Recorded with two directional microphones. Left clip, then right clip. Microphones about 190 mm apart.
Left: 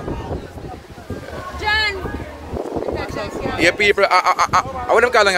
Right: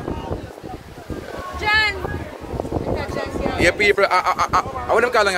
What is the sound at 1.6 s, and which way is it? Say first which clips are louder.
Boat: right 1 dB; 45° right (ahead or behind).